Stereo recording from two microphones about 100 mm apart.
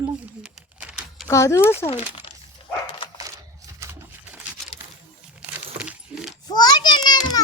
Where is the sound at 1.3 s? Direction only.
30° left (ahead or behind).